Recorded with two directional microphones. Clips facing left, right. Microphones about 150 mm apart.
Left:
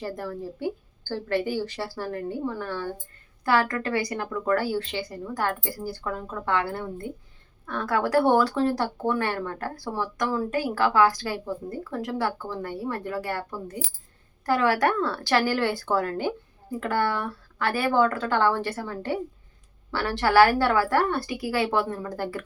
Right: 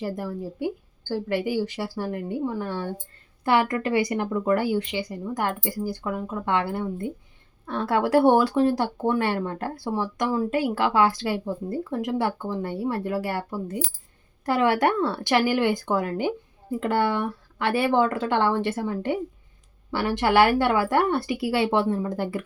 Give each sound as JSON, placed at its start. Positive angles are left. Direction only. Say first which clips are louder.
{"t": 0.2, "sound": "speech", "louder": "right 2 dB", "side_deg": -15}